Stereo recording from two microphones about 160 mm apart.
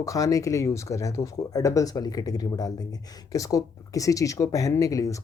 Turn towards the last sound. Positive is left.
turn(degrees=20)  # may be behind; listen again after turning